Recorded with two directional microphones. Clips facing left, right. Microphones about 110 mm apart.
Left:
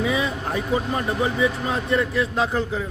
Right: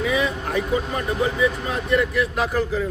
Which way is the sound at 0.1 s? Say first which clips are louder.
Right 1 dB; 30° left (ahead or behind).